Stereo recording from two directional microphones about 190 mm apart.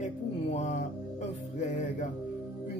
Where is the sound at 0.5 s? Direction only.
40° left (ahead or behind).